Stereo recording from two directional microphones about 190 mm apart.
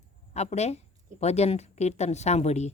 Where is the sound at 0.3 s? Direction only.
35° left (ahead or behind).